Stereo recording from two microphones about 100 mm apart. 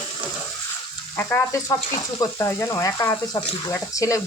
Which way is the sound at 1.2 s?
20° left (ahead or behind).